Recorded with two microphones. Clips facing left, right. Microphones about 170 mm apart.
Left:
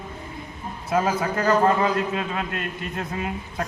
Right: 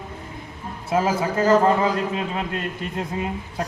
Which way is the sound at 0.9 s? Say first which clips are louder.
Right 1 dB; 25° right (ahead or behind).